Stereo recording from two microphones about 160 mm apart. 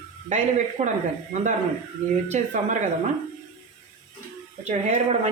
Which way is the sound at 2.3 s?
50° right (ahead or behind).